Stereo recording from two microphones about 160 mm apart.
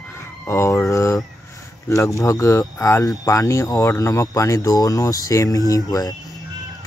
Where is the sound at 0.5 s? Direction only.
15° left (ahead or behind).